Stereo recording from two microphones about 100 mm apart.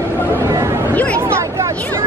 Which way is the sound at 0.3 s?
30° right (ahead or behind).